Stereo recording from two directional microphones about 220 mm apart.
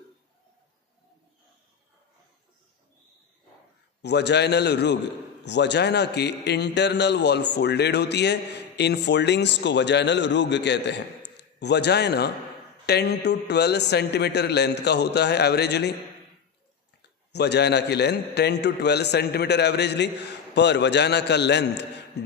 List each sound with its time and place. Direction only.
4.0 s a man's voice: 50° left (ahead or behind)
17.3 s a man's voice: 50° left (ahead or behind)